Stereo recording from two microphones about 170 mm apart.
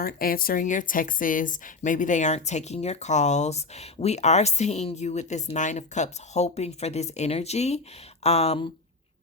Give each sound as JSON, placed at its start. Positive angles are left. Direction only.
{"t": 0.0, "sound": "a woman's voice", "side_deg": 60}